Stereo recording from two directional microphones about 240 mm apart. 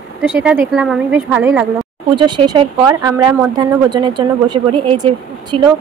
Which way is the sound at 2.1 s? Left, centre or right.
Centre.